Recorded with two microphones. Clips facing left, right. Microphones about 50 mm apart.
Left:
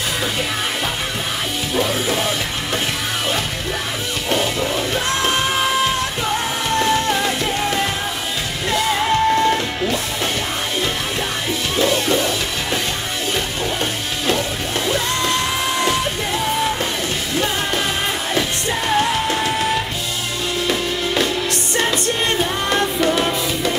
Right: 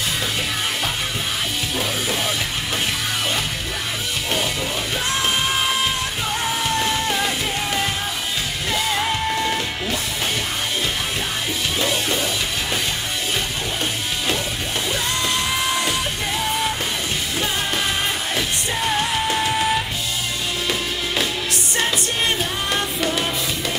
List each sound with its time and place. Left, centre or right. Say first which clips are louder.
1.8 s music: left 6 dB; centre
4.3 s music: left 5 dB; centre
6.7 s music: left 8 dB; centre
11.7 s music: left 6 dB; centre
14.9 s music: left 4 dB; centre
18.3 s music: left 3 dB; centre
20.6 s music: left 5 dB; centre